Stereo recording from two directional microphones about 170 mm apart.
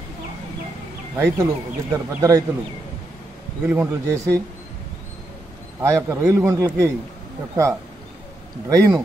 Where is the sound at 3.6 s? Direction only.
15° right (ahead or behind).